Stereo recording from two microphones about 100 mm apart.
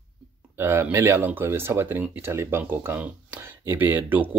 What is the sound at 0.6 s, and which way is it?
Speech, 20° right (ahead or behind).